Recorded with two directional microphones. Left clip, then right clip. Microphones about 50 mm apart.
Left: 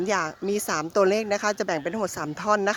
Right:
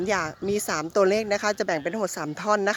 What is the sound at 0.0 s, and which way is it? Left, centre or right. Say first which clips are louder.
A woman's voice: even; right.